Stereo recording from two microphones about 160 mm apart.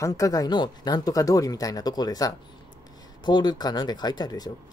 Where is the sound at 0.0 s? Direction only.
20° left (ahead or behind).